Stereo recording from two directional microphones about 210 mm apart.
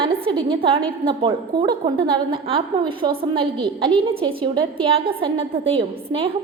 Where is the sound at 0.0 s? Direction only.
25° right (ahead or behind).